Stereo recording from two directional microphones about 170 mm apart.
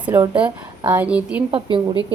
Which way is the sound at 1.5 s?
30° right (ahead or behind).